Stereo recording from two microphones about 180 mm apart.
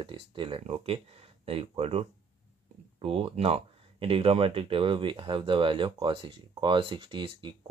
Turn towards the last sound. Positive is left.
turn(degrees=-30)  # may be behind; listen again after turning